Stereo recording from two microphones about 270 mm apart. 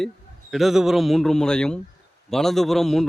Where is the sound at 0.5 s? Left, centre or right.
Centre.